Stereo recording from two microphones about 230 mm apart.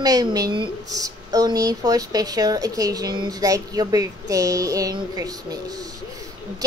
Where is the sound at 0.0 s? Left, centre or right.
Centre.